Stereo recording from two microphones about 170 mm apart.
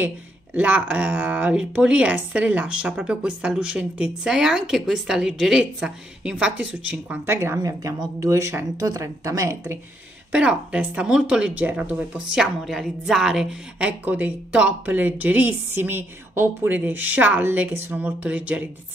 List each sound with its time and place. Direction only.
0.6 s speech: 10° right (ahead or behind)